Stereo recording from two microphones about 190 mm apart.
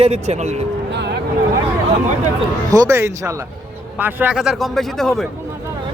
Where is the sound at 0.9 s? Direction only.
65° right (ahead or behind).